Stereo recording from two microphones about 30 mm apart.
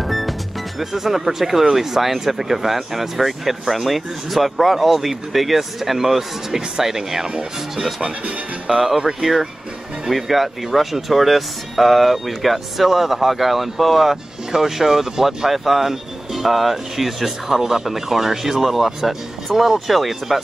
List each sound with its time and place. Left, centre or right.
0.0 s speech: centre
8.7 s speech: centre
12.7 s speech: centre
14.5 s speech: centre